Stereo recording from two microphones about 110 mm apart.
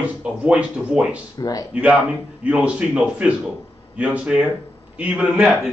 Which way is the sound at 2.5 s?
10° right (ahead or behind).